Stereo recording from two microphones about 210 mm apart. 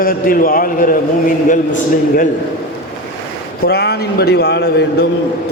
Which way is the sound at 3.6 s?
50° left (ahead or behind).